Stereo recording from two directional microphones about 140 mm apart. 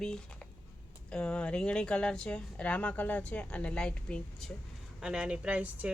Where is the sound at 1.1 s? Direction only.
10° left (ahead or behind).